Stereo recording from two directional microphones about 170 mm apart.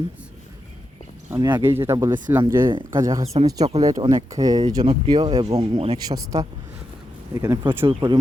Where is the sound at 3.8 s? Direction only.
20° right (ahead or behind).